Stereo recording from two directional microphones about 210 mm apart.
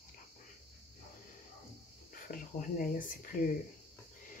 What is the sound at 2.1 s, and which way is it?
Speech, 40° left (ahead or behind).